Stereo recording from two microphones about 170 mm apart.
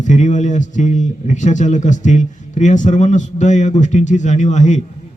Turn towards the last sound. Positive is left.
turn(degrees=45)  # may be behind; listen again after turning